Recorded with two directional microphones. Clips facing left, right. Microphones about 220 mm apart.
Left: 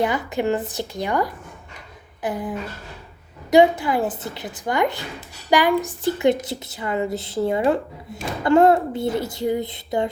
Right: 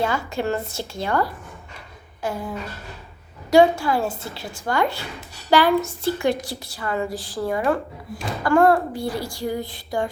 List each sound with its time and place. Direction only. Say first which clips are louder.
0.0 s a woman's voice: left 2 dB; 20° left (ahead or behind)